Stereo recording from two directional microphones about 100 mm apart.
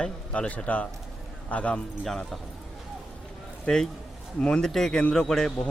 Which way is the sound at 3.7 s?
10° left (ahead or behind).